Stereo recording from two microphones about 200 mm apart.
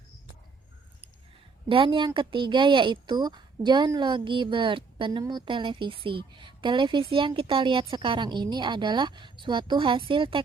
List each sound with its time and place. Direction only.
1.7 s speech: 25° right (ahead or behind)